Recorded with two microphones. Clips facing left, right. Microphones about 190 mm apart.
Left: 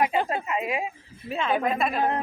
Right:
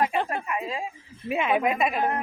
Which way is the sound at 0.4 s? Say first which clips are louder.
Left 2 dB; 20° left (ahead or behind).